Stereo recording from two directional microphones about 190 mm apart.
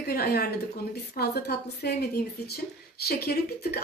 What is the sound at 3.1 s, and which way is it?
Speech, 55° left (ahead or behind).